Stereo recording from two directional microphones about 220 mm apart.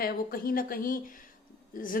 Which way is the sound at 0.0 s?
40° left (ahead or behind).